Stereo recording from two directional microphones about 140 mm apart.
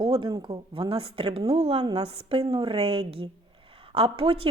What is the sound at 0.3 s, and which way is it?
A woman's voice, 30° right (ahead or behind).